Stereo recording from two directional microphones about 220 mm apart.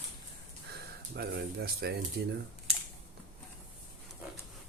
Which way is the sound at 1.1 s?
45° right (ahead or behind).